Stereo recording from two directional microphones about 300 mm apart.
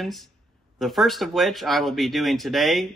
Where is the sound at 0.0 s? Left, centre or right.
Centre.